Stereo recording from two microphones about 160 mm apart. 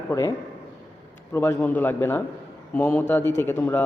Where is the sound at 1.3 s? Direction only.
15° left (ahead or behind).